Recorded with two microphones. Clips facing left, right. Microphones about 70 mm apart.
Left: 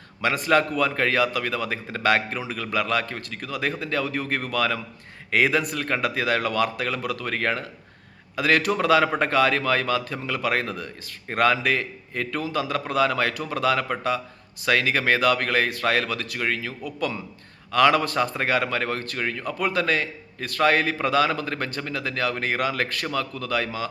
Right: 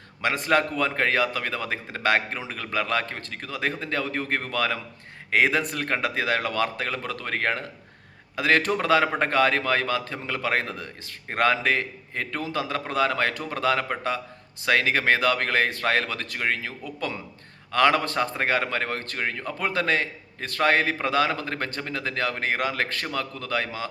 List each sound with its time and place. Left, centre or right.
0.2 s a man's voice: right